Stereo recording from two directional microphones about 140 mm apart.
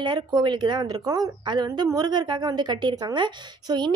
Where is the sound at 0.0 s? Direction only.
30° right (ahead or behind).